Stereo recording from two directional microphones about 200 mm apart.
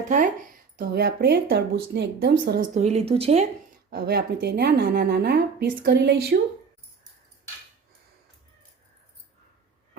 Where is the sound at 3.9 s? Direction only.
50° right (ahead or behind).